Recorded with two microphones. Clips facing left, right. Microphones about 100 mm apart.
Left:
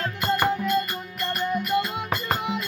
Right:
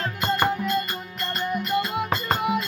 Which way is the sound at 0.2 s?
20° right (ahead or behind).